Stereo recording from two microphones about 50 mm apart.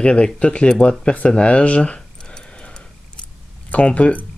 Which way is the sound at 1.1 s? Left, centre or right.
Left.